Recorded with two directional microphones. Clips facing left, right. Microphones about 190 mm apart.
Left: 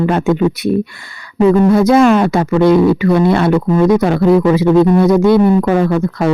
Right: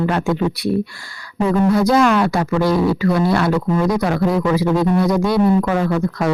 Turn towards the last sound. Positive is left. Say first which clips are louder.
# left 5 dB
turn(degrees=30)  # may be behind; listen again after turning